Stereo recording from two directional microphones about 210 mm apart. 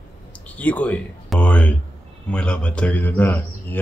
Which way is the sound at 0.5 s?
5° left (ahead or behind).